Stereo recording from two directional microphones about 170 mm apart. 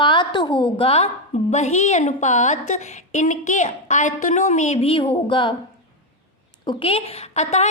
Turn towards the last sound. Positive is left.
turn(degrees=40)  # may be behind; listen again after turning